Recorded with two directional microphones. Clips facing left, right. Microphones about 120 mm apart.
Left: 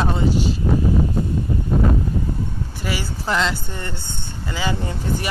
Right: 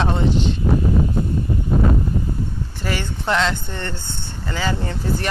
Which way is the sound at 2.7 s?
10° left (ahead or behind).